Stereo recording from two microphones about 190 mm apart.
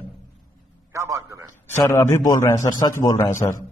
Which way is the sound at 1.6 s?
10° left (ahead or behind).